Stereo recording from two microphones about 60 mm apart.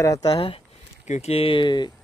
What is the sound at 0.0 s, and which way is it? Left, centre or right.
Speech, left.